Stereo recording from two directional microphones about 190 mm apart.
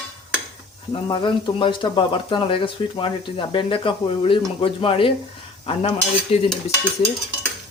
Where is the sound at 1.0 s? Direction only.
25° left (ahead or behind).